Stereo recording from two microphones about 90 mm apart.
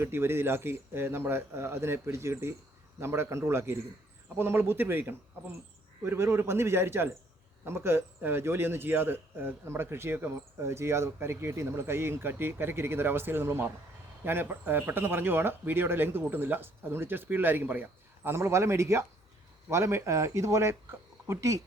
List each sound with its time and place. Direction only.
0.0 s a man's voice: 30° right (ahead or behind)